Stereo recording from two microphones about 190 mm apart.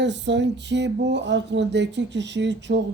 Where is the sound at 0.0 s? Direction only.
70° right (ahead or behind).